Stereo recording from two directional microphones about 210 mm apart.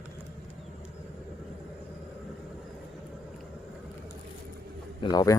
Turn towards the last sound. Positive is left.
turn(degrees=20)  # may be behind; listen again after turning